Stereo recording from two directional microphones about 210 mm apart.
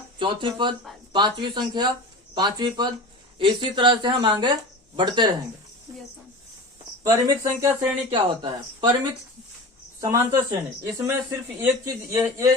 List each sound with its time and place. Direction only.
0.2 s a woman's voice: 20° right (ahead or behind)
7.0 s a woman's voice: 15° right (ahead or behind)
10.0 s speech: 15° right (ahead or behind)